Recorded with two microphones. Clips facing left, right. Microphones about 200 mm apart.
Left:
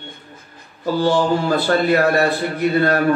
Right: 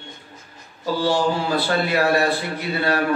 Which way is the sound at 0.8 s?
50° left (ahead or behind).